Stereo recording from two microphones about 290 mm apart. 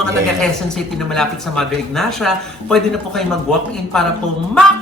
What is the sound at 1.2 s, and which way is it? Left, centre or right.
A man's voice, centre.